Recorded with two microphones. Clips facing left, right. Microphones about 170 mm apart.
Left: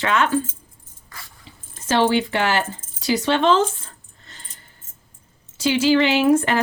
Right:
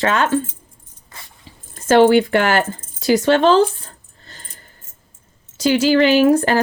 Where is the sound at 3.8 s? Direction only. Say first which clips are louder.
Right 3 dB; 40° right (ahead or behind).